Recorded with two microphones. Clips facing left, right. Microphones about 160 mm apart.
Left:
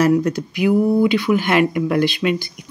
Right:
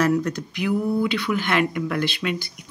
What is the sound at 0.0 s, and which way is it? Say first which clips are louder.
Speech: left 5 dB; 10° left (ahead or behind).